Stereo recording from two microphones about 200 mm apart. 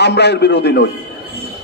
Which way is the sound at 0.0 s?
55° left (ahead or behind).